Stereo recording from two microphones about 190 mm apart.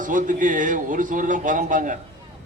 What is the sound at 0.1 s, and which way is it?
A man's voice, 45° right (ahead or behind).